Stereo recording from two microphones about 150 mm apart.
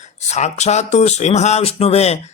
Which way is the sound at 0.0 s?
50° left (ahead or behind).